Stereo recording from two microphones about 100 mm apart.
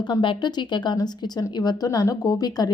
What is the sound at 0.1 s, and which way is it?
A woman's voice, 50° left (ahead or behind).